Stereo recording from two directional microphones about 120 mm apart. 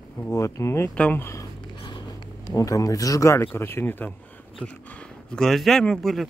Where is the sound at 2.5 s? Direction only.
30° left (ahead or behind).